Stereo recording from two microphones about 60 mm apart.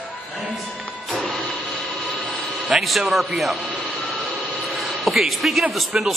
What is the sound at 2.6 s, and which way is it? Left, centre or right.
Speech, centre.